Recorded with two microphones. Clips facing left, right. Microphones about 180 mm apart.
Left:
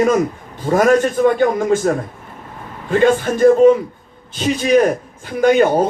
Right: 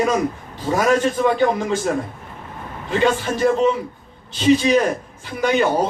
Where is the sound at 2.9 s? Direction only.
50° left (ahead or behind).